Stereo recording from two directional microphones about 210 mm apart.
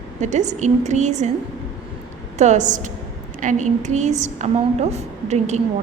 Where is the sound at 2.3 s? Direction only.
35° right (ahead or behind).